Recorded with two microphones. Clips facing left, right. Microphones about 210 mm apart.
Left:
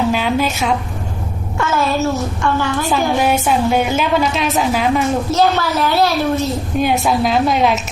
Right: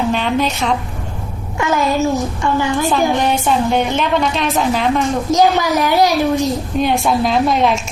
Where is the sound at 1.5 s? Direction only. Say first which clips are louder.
Right 1 dB; 15° right (ahead or behind).